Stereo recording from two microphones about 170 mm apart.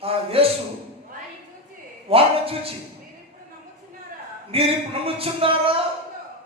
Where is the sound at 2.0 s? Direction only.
35° right (ahead or behind).